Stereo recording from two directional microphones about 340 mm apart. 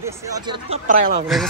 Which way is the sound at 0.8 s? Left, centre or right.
Right.